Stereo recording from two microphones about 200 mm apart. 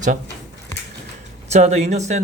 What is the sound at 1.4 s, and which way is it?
Speech, 35° right (ahead or behind).